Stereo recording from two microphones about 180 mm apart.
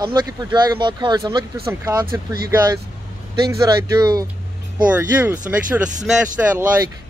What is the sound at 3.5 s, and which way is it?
Speech, 20° right (ahead or behind).